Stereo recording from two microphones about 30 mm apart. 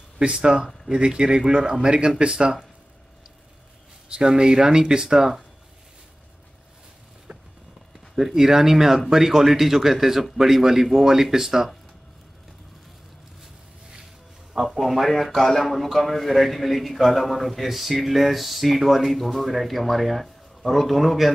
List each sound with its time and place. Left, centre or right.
0.3 s speech: right
4.1 s speech: right
7.3 s a sound: right
8.2 s speech: centre
14.5 s a man's voice: centre